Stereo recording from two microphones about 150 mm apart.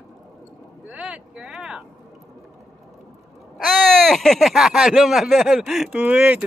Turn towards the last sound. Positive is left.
turn(degrees=-5)  # may be behind; listen again after turning